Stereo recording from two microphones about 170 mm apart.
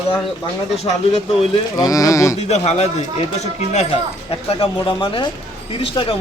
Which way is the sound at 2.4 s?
40° left (ahead or behind).